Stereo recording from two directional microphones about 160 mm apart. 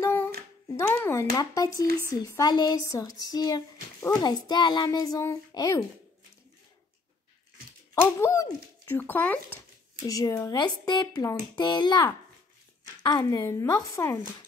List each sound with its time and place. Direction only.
0.0 s humming: 15° left (ahead or behind)
0.7 s speech: 15° left (ahead or behind)
7.9 s speech: 20° left (ahead or behind)
10.0 s speech: 20° left (ahead or behind)